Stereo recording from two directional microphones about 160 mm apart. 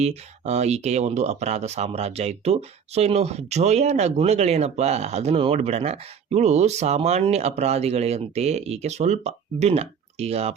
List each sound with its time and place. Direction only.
0.0 s speech: 45° right (ahead or behind)